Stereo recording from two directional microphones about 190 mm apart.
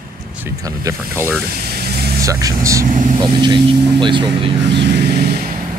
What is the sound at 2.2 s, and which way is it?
Speech, 15° right (ahead or behind).